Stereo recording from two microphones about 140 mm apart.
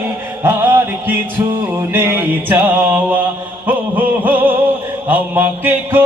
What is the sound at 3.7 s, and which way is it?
Music, 10° right (ahead or behind).